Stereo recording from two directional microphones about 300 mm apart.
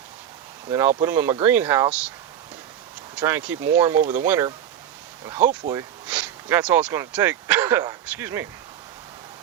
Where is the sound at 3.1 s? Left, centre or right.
Centre.